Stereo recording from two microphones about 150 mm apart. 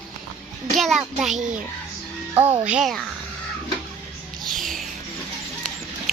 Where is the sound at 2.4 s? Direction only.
10° right (ahead or behind).